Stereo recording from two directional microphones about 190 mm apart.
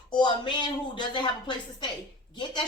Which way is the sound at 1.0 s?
25° left (ahead or behind).